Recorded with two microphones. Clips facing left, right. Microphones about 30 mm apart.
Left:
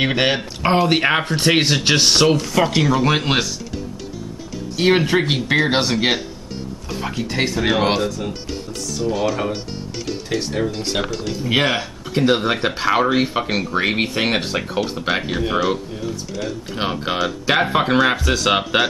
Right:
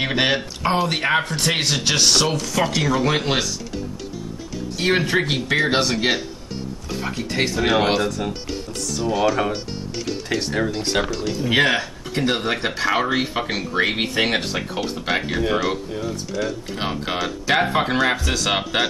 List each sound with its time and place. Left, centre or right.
0.0 s speech: centre
2.6 s speech: centre
4.7 s speech: centre
10.5 s speech: centre
11.0 s speech: centre
16.8 s speech: centre